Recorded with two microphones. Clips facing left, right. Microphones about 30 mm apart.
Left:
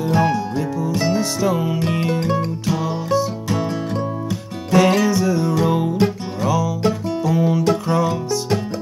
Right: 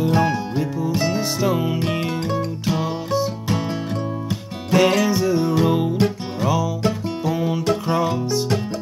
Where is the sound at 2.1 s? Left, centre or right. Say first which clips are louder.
Left 3 dB; centre.